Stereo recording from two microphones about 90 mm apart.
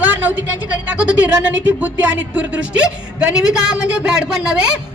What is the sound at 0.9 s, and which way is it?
A man's voice, 15° right (ahead or behind).